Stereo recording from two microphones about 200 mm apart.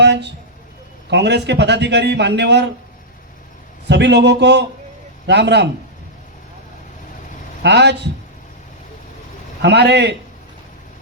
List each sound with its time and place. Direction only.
0.0 s a sound: 60° right (ahead or behind)
1.1 s a man's voice: 60° right (ahead or behind)
3.8 s a man's voice: 60° right (ahead or behind)
7.6 s a man's voice: 60° right (ahead or behind)
9.6 s a man's voice: 60° right (ahead or behind)